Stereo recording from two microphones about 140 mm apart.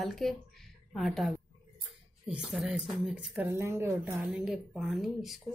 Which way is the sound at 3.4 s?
20° right (ahead or behind).